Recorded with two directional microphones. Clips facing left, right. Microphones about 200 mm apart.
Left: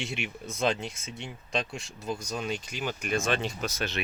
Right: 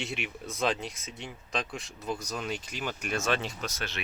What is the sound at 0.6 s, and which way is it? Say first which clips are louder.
Speech: left 2 dB; 25° left (ahead or behind).